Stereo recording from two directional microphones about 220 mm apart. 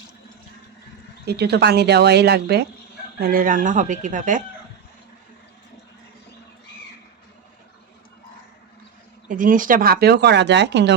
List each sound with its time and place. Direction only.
1.3 s speech: 50° right (ahead or behind)
9.3 s speech: 40° right (ahead or behind)